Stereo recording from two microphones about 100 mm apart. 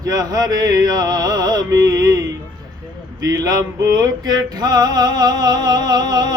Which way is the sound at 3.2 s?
35° right (ahead or behind).